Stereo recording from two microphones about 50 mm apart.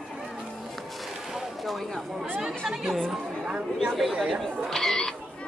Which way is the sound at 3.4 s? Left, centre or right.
Centre.